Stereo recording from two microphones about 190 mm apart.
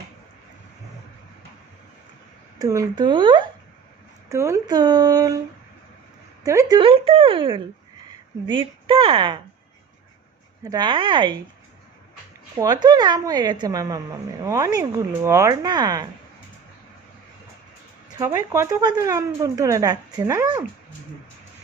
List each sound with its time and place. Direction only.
2.6 s a woman's voice: 20° right (ahead or behind)
4.3 s a woman's voice: 15° right (ahead or behind)
6.4 s a woman's voice: 15° right (ahead or behind)
10.6 s a woman's voice: 20° right (ahead or behind)
12.5 s a woman's voice: 20° right (ahead or behind)
18.2 s speech: 15° right (ahead or behind)